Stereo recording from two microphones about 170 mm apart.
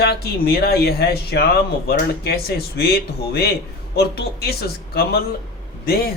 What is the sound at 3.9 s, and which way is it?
A man's voice, 70° left (ahead or behind).